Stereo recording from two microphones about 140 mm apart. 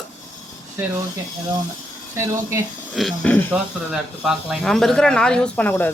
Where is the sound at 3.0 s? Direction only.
Centre (ahead or behind).